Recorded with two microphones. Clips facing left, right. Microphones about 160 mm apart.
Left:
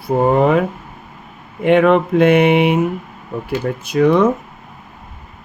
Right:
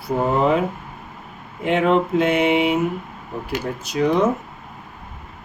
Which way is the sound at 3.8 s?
60° left (ahead or behind).